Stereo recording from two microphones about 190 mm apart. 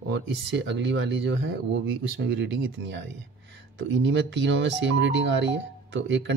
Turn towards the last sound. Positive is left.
turn(degrees=-70)  # may be behind; listen again after turning